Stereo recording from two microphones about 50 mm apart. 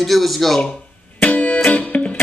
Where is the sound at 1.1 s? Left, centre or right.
Left.